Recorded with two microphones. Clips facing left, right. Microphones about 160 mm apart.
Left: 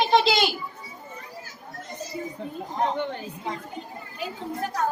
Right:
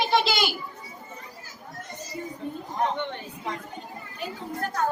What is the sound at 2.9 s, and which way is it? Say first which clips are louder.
Speech: left 3 dB; 35° left (ahead or behind).